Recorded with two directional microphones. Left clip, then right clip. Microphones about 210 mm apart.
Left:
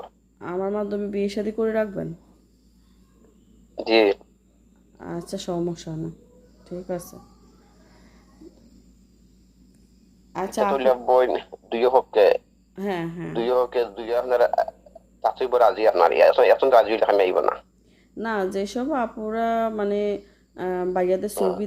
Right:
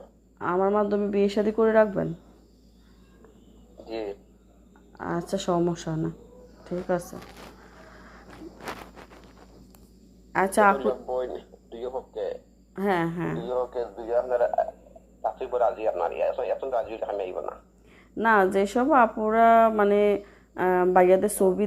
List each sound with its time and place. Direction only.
0.3 s speech: 10° left (ahead or behind)
3.8 s speech: 60° left (ahead or behind)
4.9 s speech: 5° left (ahead or behind)
10.3 s speech: centre (ahead or behind)
10.8 s speech: 50° left (ahead or behind)
12.7 s speech: 10° left (ahead or behind)
13.4 s speech: 50° left (ahead or behind)
14.2 s speech: 70° left (ahead or behind)
18.2 s speech: 15° left (ahead or behind)